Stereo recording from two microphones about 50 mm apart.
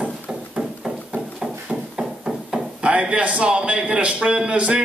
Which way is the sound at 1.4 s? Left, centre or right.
Centre.